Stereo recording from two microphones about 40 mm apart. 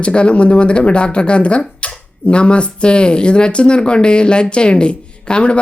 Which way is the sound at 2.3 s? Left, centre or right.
Left.